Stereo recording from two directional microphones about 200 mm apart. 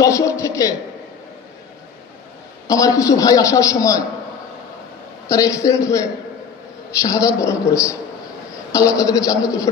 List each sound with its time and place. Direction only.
0.0 s a sound: 15° left (ahead or behind)
2.7 s a man's voice: 15° left (ahead or behind)
5.3 s a man's voice: 15° left (ahead or behind)